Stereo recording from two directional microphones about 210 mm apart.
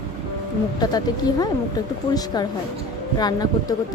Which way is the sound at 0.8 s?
20° left (ahead or behind).